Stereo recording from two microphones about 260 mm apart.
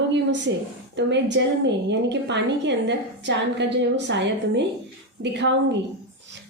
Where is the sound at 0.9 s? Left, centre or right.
Right.